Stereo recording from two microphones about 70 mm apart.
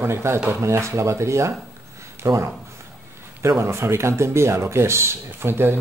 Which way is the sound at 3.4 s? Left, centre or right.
Right.